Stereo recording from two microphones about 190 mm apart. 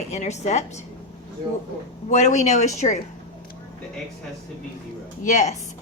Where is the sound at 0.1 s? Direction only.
35° left (ahead or behind).